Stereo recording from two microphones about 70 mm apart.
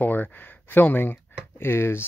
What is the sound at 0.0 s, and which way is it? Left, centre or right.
Speech, left.